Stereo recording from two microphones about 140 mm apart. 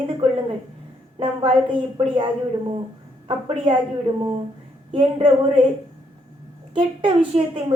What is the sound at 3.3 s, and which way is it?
A woman's voice, 35° right (ahead or behind).